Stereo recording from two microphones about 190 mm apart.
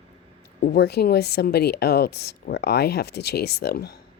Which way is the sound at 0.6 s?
60° left (ahead or behind).